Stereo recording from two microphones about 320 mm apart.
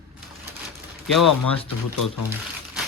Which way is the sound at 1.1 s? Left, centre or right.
Left.